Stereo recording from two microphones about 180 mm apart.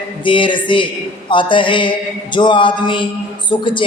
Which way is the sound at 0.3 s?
25° left (ahead or behind).